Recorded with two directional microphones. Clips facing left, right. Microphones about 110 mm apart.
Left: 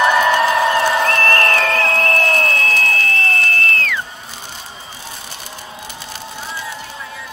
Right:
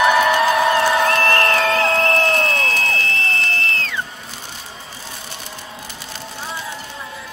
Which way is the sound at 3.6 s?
30° right (ahead or behind).